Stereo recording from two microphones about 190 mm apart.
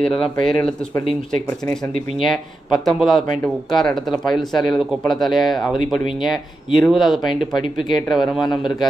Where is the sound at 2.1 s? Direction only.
Centre (ahead or behind).